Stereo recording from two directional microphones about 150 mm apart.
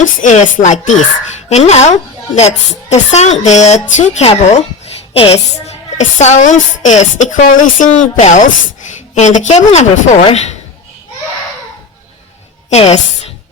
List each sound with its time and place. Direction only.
0.0 s a woman's voice: 55° left (ahead or behind)
12.7 s a woman's voice: 45° left (ahead or behind)